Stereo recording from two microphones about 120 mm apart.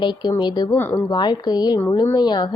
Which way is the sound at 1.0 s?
40° left (ahead or behind).